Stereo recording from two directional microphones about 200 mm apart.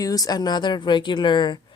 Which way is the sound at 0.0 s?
20° left (ahead or behind).